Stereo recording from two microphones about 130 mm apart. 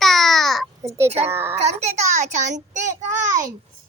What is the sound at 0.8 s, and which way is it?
Speech, 25° right (ahead or behind).